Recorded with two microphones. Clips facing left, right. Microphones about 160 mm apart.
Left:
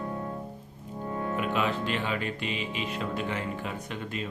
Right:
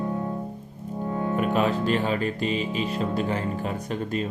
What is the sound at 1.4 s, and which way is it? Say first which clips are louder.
Speech: right 6 dB; 40° right (ahead or behind).